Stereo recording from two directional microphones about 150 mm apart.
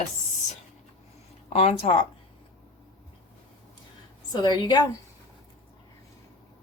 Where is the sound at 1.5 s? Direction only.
45° left (ahead or behind).